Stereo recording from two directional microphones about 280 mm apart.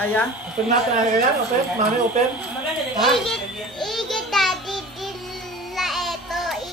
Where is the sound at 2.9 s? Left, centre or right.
Centre.